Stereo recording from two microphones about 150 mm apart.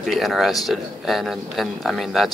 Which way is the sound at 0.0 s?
Centre (ahead or behind).